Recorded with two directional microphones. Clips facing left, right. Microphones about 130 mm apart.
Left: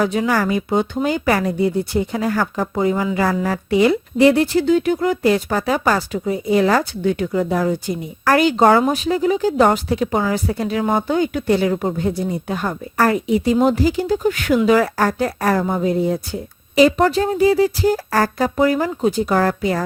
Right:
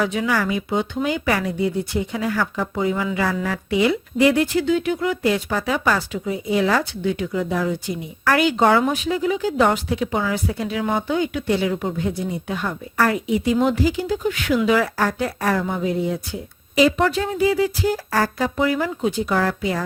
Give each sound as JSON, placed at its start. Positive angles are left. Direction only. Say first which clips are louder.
{"t": 0.0, "sound": "a woman's voice", "louder": "left 3 dB", "side_deg": 40}